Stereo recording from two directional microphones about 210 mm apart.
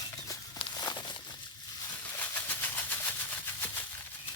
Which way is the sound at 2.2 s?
10° left (ahead or behind).